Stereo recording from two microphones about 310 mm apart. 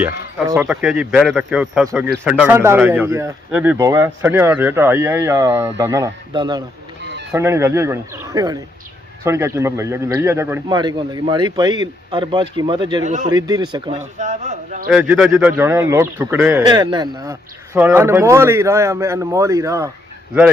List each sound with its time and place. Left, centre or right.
0.0 s speech: centre
7.0 s chicken: right
7.3 s speech: centre
14.8 s speech: centre